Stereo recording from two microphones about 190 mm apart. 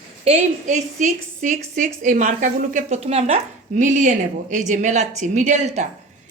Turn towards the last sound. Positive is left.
turn(degrees=-40)  # may be behind; listen again after turning